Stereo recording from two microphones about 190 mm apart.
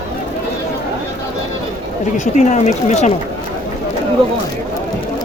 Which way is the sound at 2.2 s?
40° left (ahead or behind).